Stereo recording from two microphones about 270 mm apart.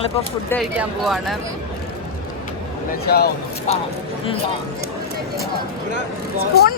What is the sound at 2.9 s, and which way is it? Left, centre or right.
Speech, left.